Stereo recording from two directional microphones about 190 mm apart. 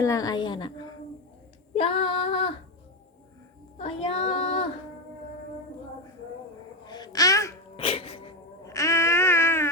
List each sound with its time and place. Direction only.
0.0 s female singing: 20° left (ahead or behind)
1.7 s female singing: 30° left (ahead or behind)
3.8 s child singing: 30° left (ahead or behind)
6.8 s a sound: 20° left (ahead or behind)
7.8 s music: 30° left (ahead or behind)
8.6 s a sound: 15° left (ahead or behind)